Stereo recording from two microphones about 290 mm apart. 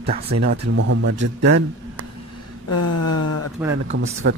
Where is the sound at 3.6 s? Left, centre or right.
Centre.